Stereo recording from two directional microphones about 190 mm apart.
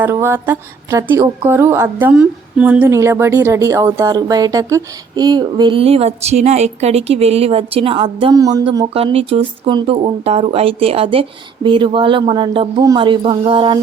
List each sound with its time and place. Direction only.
0.0 s a woman's voice: 15° right (ahead or behind)
8.9 s a woman's voice: 30° right (ahead or behind)